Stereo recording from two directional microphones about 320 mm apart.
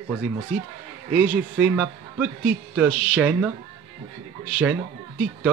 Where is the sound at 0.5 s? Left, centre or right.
Right.